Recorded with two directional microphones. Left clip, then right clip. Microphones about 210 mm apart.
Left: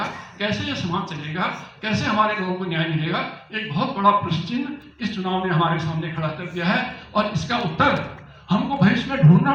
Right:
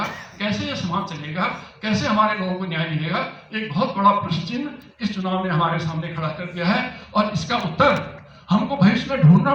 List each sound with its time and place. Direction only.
0.0 s a man's voice: 20° right (ahead or behind)